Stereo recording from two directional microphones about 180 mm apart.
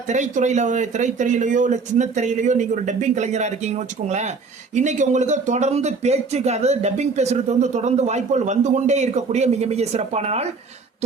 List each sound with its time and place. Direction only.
0.1 s speech: 40° right (ahead or behind)